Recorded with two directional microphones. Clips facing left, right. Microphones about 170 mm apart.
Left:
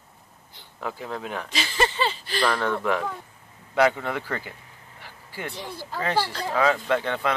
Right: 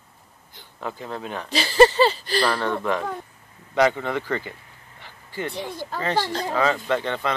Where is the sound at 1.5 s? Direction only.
35° right (ahead or behind).